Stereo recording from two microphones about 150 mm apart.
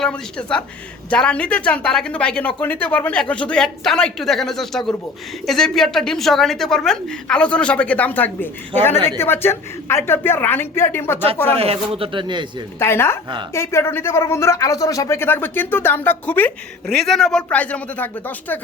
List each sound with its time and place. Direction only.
0.0 s a woman's voice: 5° left (ahead or behind)
11.5 s speech: 40° right (ahead or behind)
12.8 s a woman's voice: 15° left (ahead or behind)
13.2 s speech: 30° right (ahead or behind)
13.5 s a woman's voice: 20° left (ahead or behind)